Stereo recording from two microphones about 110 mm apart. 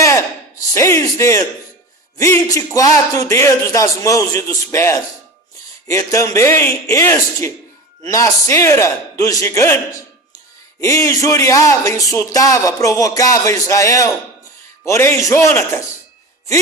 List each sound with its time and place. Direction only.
0.0 s a sound: 30° left (ahead or behind)
0.7 s speech: 25° left (ahead or behind)
10.8 s speech: 30° left (ahead or behind)